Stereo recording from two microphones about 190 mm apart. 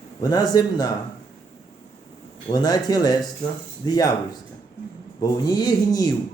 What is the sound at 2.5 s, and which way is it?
Speech, 20° left (ahead or behind).